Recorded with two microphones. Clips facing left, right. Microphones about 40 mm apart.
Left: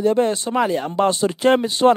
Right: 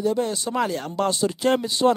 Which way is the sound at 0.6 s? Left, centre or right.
Left.